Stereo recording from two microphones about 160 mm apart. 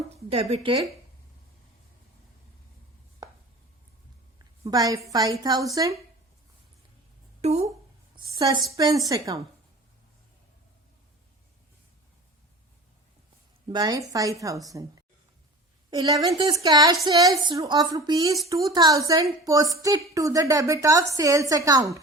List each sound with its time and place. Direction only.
0.5 s speech: 35° right (ahead or behind)
3.2 s chopping: 25° right (ahead or behind)
4.6 s a woman's voice: 20° right (ahead or behind)
7.4 s speech: 40° right (ahead or behind)
8.1 s a woman's voice: 25° right (ahead or behind)
13.7 s a woman's voice: 25° right (ahead or behind)